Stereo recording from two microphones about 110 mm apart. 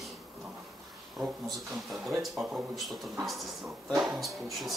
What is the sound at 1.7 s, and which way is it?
Speech, centre (ahead or behind).